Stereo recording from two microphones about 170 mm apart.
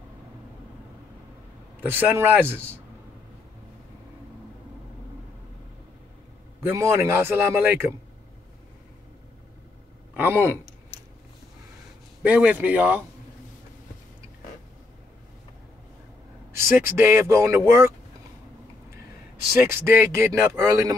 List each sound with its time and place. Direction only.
1.8 s speech: 10° right (ahead or behind)
6.6 s speech: 15° right (ahead or behind)
10.1 s speech: 10° right (ahead or behind)
12.2 s speech: 10° right (ahead or behind)
16.5 s speech: 15° right (ahead or behind)
19.8 s speech: 15° right (ahead or behind)